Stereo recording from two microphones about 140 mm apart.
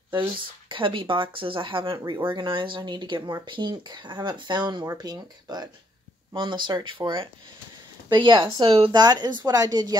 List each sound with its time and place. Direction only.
0.7 s speech: 35° right (ahead or behind)
8.9 s speech: 30° right (ahead or behind)